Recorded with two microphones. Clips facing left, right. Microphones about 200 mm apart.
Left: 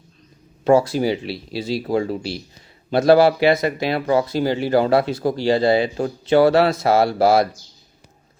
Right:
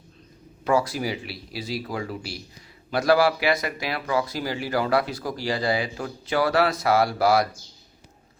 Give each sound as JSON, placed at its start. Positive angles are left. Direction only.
{"t": 0.6, "sound": "speech", "side_deg": 25}